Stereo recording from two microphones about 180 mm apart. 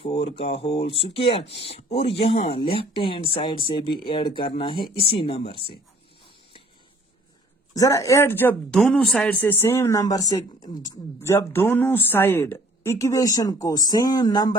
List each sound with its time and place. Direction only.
0.0 s speech: 35° left (ahead or behind)
7.8 s speech: 20° left (ahead or behind)